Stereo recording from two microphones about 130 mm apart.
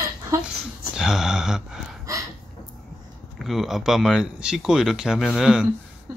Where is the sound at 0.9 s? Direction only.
5° right (ahead or behind).